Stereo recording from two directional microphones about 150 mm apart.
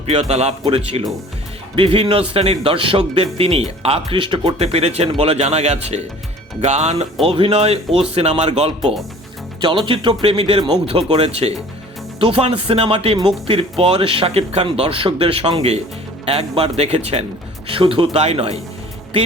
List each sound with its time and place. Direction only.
0.0 s a man's voice: 40° right (ahead or behind)
9.8 s a man's voice: 35° right (ahead or behind)